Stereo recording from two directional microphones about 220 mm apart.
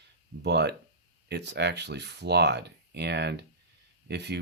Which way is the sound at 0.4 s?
50° right (ahead or behind).